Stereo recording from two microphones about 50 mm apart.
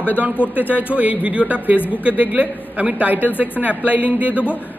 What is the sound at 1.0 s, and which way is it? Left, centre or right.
A man's voice, right.